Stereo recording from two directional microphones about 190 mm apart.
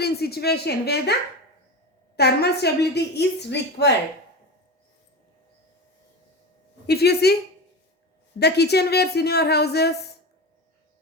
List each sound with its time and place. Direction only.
0.0 s a woman's voice: 55° left (ahead or behind)
2.1 s a woman's voice: 60° left (ahead or behind)
6.8 s a woman's voice: 55° left (ahead or behind)
8.4 s a woman's voice: 60° left (ahead or behind)